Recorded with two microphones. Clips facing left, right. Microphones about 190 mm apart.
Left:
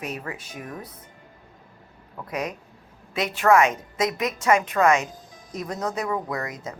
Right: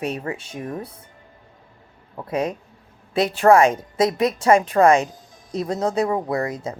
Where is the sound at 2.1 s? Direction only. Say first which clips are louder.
Right 6 dB; 30° right (ahead or behind).